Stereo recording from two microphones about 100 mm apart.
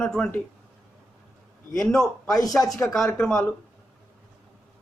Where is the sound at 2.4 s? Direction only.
35° left (ahead or behind).